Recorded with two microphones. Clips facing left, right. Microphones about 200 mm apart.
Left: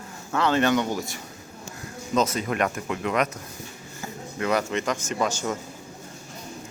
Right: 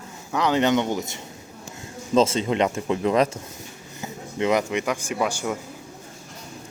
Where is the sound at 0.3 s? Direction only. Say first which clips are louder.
Right 1 dB; 15° right (ahead or behind).